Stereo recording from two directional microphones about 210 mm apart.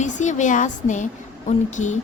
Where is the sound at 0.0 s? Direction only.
35° left (ahead or behind).